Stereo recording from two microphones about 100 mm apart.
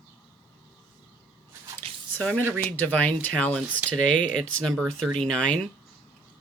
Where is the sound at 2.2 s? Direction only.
15° left (ahead or behind).